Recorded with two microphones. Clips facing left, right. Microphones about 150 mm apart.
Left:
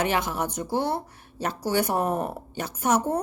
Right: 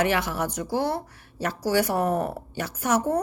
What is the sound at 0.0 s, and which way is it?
Speech, 20° left (ahead or behind).